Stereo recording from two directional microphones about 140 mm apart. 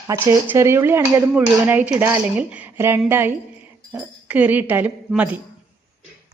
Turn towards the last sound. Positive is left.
turn(degrees=-10)  # may be behind; listen again after turning